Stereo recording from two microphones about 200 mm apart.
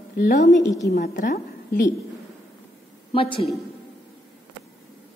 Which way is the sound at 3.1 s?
25° left (ahead or behind).